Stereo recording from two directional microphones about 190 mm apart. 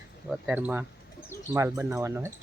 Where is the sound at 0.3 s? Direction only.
5° right (ahead or behind).